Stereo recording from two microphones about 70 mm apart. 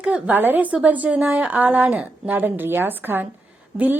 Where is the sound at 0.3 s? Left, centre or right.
Right.